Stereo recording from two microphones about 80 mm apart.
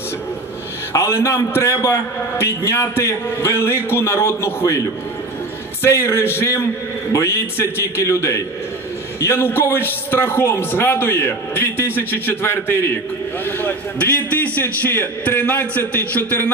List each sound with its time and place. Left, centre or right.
0.9 s a man's voice: left
5.8 s a man's voice: left